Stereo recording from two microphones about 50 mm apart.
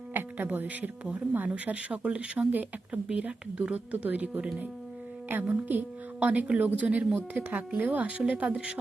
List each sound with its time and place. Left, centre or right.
0.1 s speech: right
2.5 s a woman's voice: right
3.1 s a woman's voice: right